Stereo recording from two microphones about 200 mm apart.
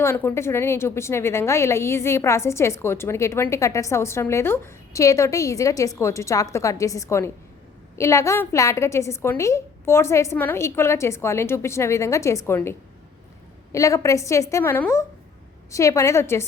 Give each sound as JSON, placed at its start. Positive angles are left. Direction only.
{"t": 0.0, "sound": "a woman's voice", "side_deg": 10}
{"t": 13.7, "sound": "a woman's voice", "side_deg": 15}